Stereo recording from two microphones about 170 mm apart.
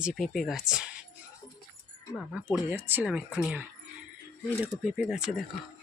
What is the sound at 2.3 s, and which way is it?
Speech, 10° right (ahead or behind).